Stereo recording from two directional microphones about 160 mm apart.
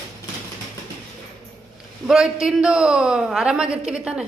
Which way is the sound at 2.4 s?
5° right (ahead or behind).